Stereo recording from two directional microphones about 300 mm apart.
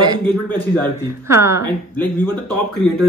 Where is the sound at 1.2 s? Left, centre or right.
Centre.